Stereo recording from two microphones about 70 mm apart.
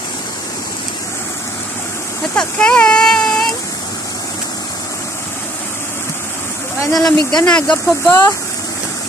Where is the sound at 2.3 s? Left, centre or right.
Centre.